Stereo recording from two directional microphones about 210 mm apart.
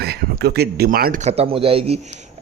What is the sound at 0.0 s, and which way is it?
Speech, 50° right (ahead or behind).